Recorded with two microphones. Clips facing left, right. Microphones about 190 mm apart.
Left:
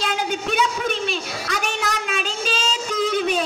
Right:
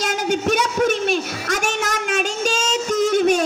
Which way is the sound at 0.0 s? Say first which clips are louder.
Right 4 dB; 45° right (ahead or behind).